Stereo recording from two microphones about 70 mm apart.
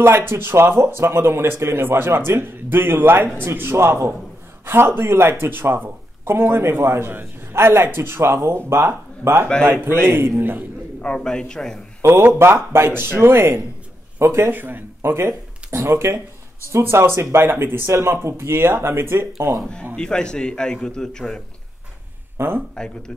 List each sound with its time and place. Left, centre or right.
0.0 s a man's voice: right
11.0 s a man's voice: centre
12.0 s a man's voice: right
14.5 s a man's voice: right
19.6 s a man's voice: centre
22.4 s a man's voice: right
22.8 s a man's voice: centre